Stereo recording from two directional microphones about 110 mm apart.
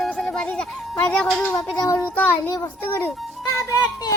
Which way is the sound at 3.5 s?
25° left (ahead or behind).